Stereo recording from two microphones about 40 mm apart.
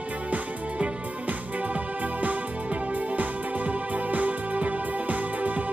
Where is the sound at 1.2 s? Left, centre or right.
Right.